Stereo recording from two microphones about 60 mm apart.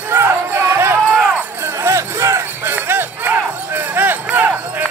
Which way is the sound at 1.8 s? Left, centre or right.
Right.